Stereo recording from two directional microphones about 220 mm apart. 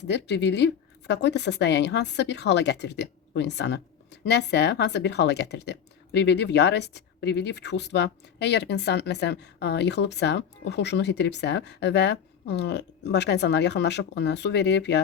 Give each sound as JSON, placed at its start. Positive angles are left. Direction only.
{"t": 0.0, "sound": "speech", "side_deg": 50}